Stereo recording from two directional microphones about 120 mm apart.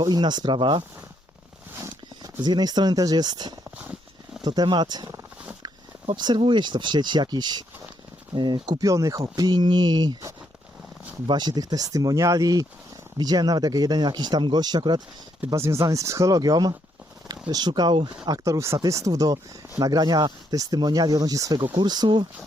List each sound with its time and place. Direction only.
0.0 s speech: 35° right (ahead or behind)
1.7 s a sound: 25° right (ahead or behind)
2.4 s speech: 35° right (ahead or behind)
8.8 s speech: 25° right (ahead or behind)
15.4 s speech: 25° right (ahead or behind); by 18.1 s 40° right (ahead or behind)
18.3 s speech: 25° right (ahead or behind)